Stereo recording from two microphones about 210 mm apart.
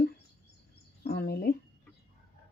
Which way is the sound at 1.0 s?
50° left (ahead or behind).